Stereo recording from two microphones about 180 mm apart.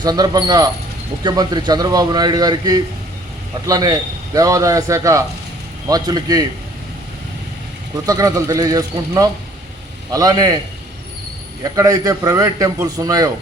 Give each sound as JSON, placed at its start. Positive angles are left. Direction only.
{"t": 0.0, "sound": "a man's voice", "side_deg": -20}
{"t": 8.0, "sound": "a man's voice", "side_deg": -20}
{"t": 11.6, "sound": "a man's voice", "side_deg": -20}